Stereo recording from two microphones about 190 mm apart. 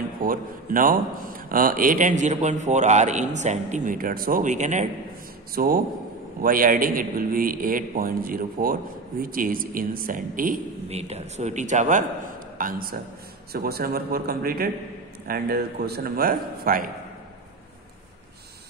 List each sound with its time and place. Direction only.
0.2 s a man's voice: 50° right (ahead or behind)
5.5 s a man's voice: 50° right (ahead or behind)